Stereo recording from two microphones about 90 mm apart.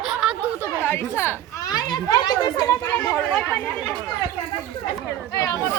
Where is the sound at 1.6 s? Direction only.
45° left (ahead or behind).